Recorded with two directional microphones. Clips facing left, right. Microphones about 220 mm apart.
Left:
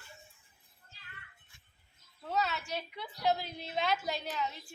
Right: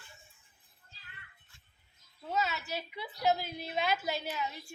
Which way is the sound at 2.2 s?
Centre (ahead or behind).